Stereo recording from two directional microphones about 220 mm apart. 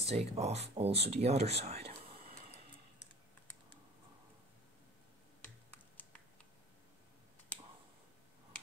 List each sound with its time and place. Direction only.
0.0 s speech: 30° right (ahead or behind)